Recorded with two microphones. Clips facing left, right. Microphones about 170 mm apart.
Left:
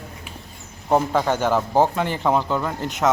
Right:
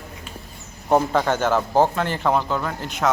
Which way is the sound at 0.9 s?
Centre (ahead or behind).